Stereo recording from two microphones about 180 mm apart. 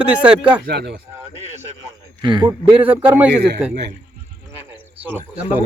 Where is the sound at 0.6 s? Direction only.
65° right (ahead or behind).